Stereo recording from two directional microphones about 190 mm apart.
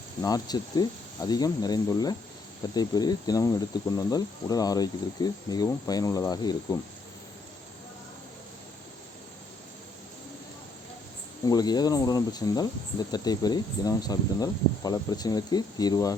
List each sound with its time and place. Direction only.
0.2 s speech: 20° left (ahead or behind)
11.4 s speech: 20° left (ahead or behind)